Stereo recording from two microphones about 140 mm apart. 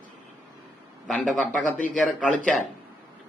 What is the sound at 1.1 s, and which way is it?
A man's voice, 5° left (ahead or behind).